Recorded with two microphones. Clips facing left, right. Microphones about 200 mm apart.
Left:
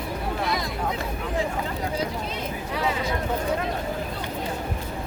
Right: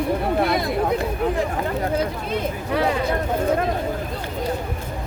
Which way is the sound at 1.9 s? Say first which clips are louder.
Right 5 dB; 55° right (ahead or behind).